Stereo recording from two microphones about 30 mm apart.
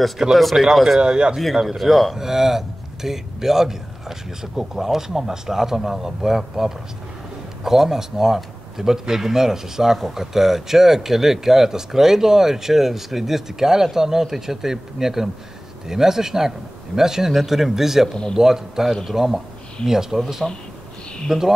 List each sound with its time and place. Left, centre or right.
0.3 s a man's voice: centre
0.9 s speech: right
1.8 s a man's voice: centre
2.1 s a man's voice: centre
20.4 s speech: centre
21.3 s a man's voice: centre